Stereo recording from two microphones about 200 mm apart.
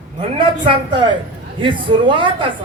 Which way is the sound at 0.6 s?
25° right (ahead or behind).